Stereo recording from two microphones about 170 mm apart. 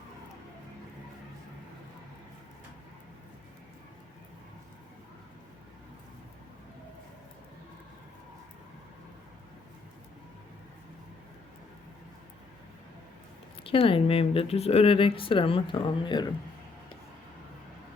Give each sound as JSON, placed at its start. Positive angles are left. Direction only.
{"t": 13.7, "sound": "speech", "side_deg": 30}